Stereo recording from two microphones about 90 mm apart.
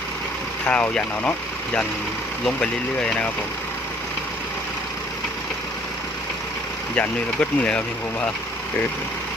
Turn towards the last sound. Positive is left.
turn(degrees=15)  # may be behind; listen again after turning